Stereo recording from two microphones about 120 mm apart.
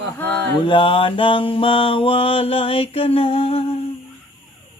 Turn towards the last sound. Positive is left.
turn(degrees=55)  # may be behind; listen again after turning